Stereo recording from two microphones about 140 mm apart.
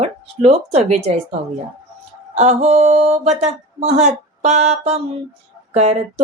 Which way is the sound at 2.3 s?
55° right (ahead or behind).